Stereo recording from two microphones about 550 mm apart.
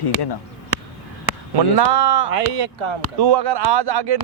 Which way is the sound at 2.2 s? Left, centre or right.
Right.